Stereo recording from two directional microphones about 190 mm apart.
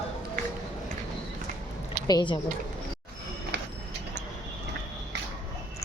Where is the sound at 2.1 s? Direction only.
25° left (ahead or behind).